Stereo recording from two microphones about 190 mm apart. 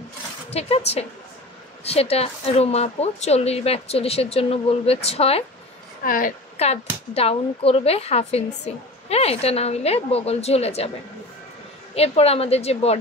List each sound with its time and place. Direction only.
0.5 s a woman's voice: 35° left (ahead or behind)
6.0 s a woman's voice: 45° left (ahead or behind)
6.5 s a woman's voice: 35° left (ahead or behind)
11.9 s a woman's voice: 30° left (ahead or behind)